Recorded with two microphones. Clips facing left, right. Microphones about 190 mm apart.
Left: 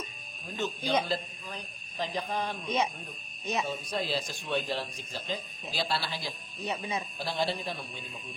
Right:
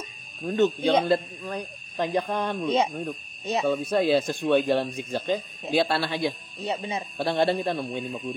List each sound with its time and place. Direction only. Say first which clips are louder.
0.4 s speech: right 12 dB; 60° right (ahead or behind)
6.6 s speech: right 4 dB; 30° right (ahead or behind)
7.2 s speech: right 11 dB; 60° right (ahead or behind)